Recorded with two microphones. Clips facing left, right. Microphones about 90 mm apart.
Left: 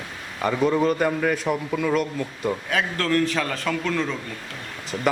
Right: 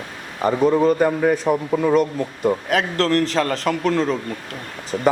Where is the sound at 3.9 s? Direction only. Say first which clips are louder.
Right 6 dB; 35° right (ahead or behind).